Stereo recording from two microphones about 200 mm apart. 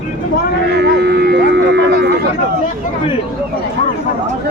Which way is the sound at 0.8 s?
55° right (ahead or behind).